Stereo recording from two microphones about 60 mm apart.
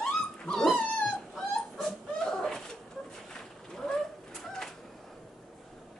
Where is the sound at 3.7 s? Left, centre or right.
Centre.